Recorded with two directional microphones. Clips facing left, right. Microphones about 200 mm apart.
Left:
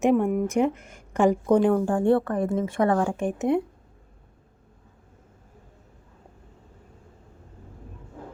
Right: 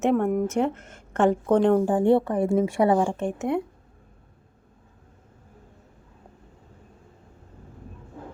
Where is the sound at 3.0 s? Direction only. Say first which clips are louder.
Left 2 dB; 15° left (ahead or behind).